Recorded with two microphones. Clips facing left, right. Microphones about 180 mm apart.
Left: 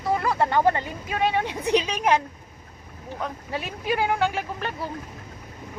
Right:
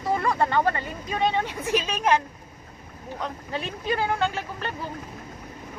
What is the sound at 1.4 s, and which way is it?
Speech, 15° left (ahead or behind).